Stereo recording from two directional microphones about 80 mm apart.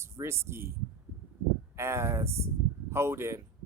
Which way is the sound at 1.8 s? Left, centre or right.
Right.